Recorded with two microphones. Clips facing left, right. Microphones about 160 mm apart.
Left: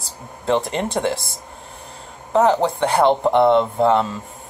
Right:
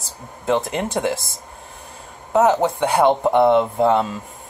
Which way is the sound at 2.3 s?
5° right (ahead or behind).